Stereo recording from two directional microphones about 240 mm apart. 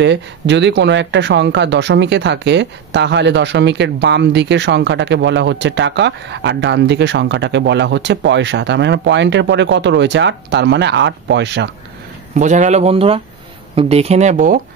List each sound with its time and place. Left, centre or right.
0.0 s speech: right
12.4 s speech: right